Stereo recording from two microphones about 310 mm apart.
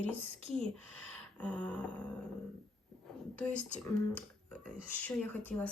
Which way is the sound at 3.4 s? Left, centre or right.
Centre.